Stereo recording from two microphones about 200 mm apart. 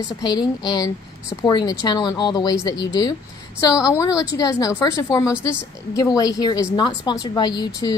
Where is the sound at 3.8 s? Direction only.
15° left (ahead or behind).